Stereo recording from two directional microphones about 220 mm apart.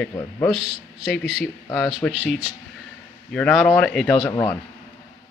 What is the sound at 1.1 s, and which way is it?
Speech, centre (ahead or behind).